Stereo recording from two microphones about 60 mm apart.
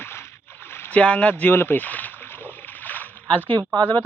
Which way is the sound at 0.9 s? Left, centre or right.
Left.